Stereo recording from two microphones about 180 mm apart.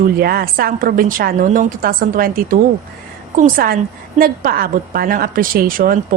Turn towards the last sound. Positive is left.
turn(degrees=-50)  # may be behind; listen again after turning